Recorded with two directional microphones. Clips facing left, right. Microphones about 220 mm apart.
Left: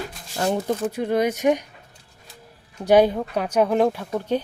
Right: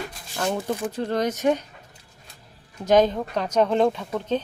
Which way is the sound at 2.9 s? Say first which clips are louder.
Left 2 dB; 10° left (ahead or behind).